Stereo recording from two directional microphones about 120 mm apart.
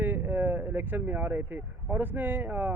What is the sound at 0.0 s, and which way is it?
Speech, 15° right (ahead or behind).